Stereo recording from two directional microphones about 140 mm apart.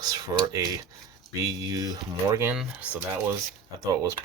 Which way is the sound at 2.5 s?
5° right (ahead or behind).